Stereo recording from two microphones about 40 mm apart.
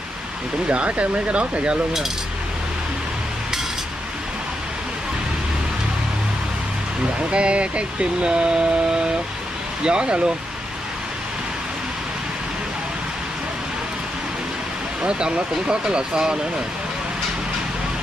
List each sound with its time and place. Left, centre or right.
0.7 s speech: right
7.2 s speech: right
15.0 s speech: right